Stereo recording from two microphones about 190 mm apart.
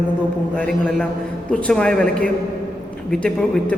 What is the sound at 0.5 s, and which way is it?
A woman's voice, 5° left (ahead or behind).